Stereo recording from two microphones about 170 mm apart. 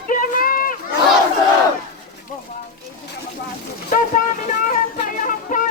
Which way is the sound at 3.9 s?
55° left (ahead or behind).